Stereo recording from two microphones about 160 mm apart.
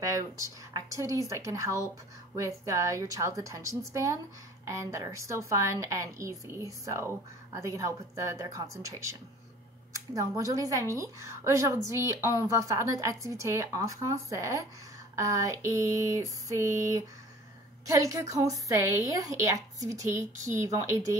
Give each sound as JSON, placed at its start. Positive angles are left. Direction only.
{"t": 0.0, "sound": "a woman's voice", "side_deg": -20}